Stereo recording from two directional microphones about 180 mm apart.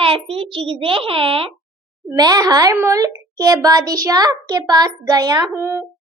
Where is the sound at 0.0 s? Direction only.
30° right (ahead or behind); by 5.8 s 15° right (ahead or behind).